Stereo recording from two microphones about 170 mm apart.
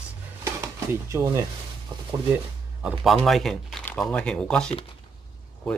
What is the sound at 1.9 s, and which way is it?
Speech, 25° right (ahead or behind).